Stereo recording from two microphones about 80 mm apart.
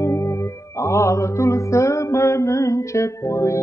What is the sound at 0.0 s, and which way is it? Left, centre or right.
Music, left.